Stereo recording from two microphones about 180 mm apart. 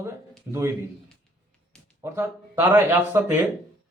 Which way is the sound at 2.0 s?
15° right (ahead or behind).